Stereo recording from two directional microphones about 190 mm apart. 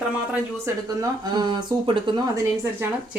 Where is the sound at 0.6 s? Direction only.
20° right (ahead or behind).